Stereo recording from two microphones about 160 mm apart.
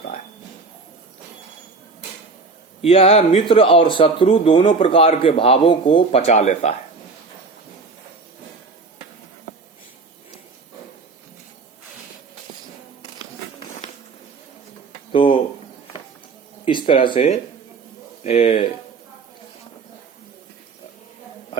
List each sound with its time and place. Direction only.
2.8 s a man's voice: 40° left (ahead or behind)
15.1 s a sound: 35° left (ahead or behind)
16.8 s a man's voice: 35° left (ahead or behind)